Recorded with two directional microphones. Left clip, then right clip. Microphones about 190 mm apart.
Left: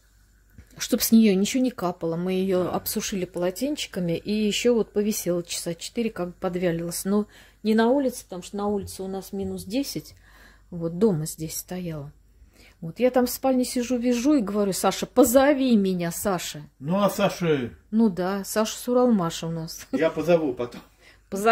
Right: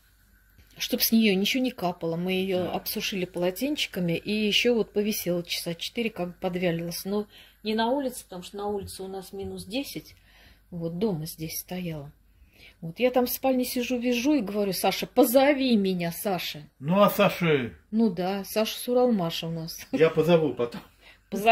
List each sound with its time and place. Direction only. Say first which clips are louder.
0.7 s speech: left 4 dB; 25° left (ahead or behind)
7.0 s speech: left 4 dB; 30° left (ahead or behind)
16.8 s speech: right 2 dB; centre (ahead or behind)
17.9 s speech: left 2 dB; 15° left (ahead or behind)